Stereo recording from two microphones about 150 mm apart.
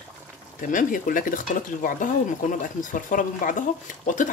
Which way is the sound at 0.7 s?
65° left (ahead or behind).